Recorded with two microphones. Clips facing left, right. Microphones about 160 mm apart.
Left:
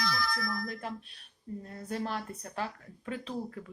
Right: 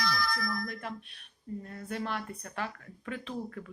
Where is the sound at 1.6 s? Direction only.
30° left (ahead or behind).